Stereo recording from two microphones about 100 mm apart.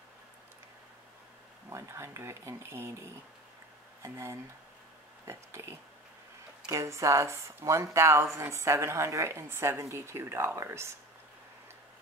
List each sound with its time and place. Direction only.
1.7 s speech: 30° right (ahead or behind)